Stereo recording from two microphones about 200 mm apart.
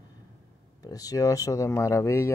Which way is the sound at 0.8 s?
20° left (ahead or behind).